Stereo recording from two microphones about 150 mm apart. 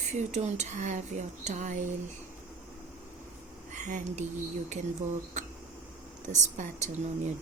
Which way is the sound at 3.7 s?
55° right (ahead or behind).